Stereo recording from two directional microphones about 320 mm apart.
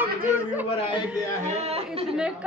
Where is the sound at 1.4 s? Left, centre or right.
Centre.